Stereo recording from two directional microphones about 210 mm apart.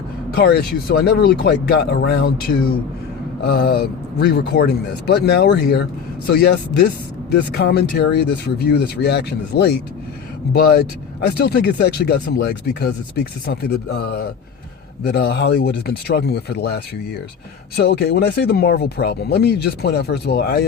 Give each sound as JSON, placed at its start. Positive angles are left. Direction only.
{"t": 0.3, "sound": "speech", "side_deg": 50}